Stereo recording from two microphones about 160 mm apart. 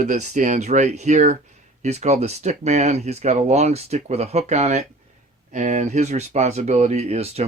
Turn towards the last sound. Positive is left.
turn(degrees=-40)  # may be behind; listen again after turning